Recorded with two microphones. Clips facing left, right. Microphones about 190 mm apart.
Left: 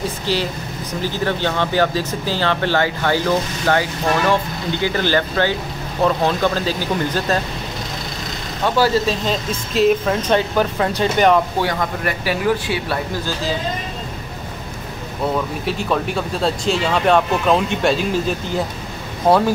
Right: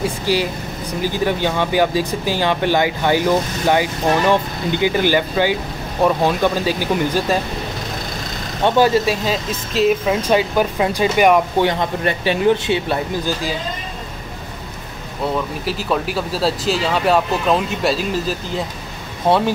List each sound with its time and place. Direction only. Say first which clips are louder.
0.0 s vehicle: right 3 dB; 10° right (ahead or behind)
1.0 s speech: right 2 dB; 15° right (ahead or behind)
8.6 s speech: right 2 dB; 20° right (ahead or behind)
11.6 s speech: right 3 dB; 25° right (ahead or behind)
15.6 s speech: even; centre (ahead or behind)